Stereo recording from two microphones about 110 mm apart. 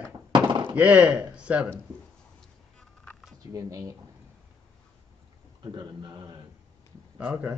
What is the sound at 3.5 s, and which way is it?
Speech, 30° right (ahead or behind).